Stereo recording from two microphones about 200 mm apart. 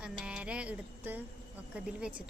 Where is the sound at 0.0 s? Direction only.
5° right (ahead or behind).